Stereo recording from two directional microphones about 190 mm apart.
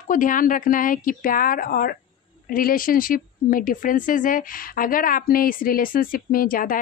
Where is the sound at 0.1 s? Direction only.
45° left (ahead or behind).